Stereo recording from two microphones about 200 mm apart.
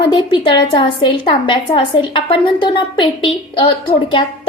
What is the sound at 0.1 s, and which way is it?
A woman's voice, 25° left (ahead or behind).